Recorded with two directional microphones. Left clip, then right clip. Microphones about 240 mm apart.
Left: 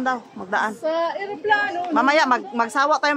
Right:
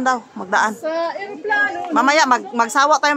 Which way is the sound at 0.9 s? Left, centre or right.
Centre.